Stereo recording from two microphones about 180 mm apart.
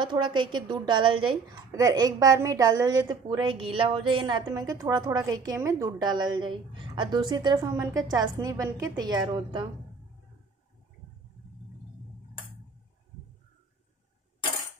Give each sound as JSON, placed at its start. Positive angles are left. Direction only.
{"t": 0.0, "sound": "a woman's voice", "side_deg": -25}